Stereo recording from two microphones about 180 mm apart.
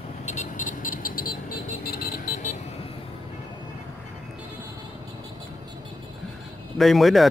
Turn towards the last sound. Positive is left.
turn(degrees=0)  # may be behind; listen again after turning